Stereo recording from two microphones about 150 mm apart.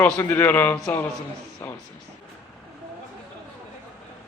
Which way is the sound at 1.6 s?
15° left (ahead or behind).